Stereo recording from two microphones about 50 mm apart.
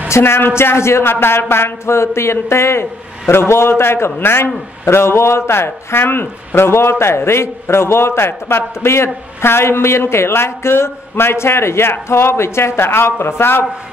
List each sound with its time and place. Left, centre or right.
0.1 s a man's voice: left